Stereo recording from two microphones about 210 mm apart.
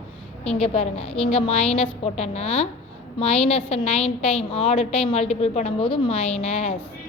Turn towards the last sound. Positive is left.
turn(degrees=30)  # may be behind; listen again after turning